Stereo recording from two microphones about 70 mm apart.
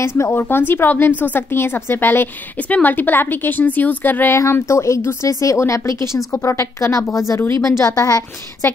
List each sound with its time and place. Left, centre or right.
0.2 s speech: left
4.4 s speech: left
6.3 s speech: left